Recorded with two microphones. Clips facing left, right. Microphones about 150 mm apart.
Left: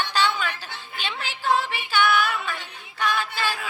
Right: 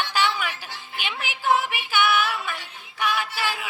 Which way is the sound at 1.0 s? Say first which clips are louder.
Even; 15° right (ahead or behind).